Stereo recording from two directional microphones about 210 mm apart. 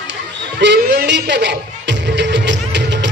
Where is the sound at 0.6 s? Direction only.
55° right (ahead or behind).